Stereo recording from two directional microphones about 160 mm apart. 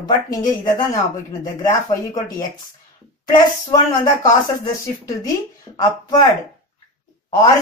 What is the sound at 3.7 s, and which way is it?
Speech, 25° left (ahead or behind).